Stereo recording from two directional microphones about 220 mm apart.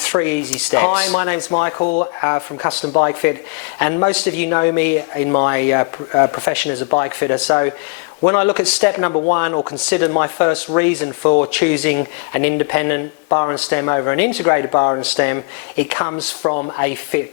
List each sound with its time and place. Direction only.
0.1 s speech: 10° left (ahead or behind)
1.8 s speech: 35° left (ahead or behind)
2.2 s speech: 15° left (ahead or behind)